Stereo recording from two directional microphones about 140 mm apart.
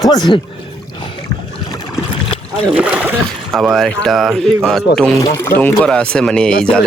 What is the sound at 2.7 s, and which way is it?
Speech, 10° right (ahead or behind).